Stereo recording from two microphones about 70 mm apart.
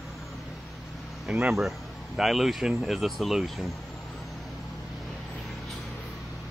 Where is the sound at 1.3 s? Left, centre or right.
Centre.